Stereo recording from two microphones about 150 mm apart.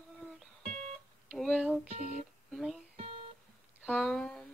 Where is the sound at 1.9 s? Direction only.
55° right (ahead or behind).